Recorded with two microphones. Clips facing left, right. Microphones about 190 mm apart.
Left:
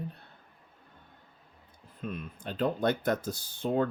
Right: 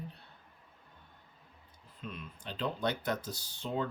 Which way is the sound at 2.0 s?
50° left (ahead or behind).